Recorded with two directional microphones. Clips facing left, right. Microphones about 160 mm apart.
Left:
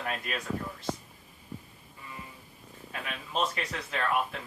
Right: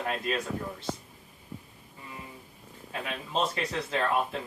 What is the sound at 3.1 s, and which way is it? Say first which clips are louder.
Speech: right 1 dB; 25° right (ahead or behind).